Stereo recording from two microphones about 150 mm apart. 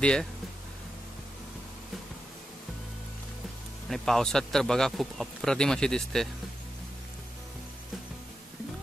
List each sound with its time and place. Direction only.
0.0 s speech: 5° left (ahead or behind)
3.9 s speech: 5° left (ahead or behind)